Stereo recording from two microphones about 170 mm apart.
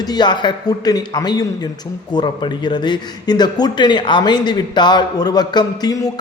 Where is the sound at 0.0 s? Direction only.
25° left (ahead or behind).